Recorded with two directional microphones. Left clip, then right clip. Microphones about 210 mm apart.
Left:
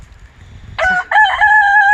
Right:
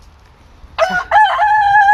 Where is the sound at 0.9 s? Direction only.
15° right (ahead or behind).